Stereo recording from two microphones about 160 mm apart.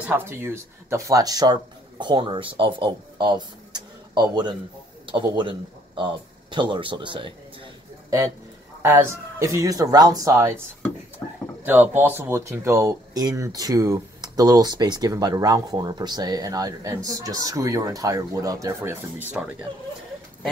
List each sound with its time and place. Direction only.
0.0 s speech: 15° right (ahead or behind); by 7.3 s 30° right (ahead or behind)
8.8 s speech: 15° right (ahead or behind)
11.6 s speech: 10° right (ahead or behind)